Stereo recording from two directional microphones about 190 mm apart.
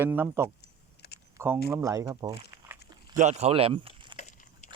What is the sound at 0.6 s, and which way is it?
Typing, 60° left (ahead or behind).